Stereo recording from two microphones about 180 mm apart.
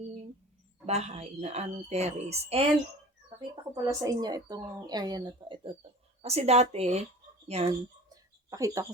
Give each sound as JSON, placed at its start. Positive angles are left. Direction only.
{"t": 0.9, "sound": "a woman's voice", "side_deg": -35}
{"t": 3.2, "sound": "a woman's voice", "side_deg": -25}
{"t": 8.1, "sound": "a sound", "side_deg": -20}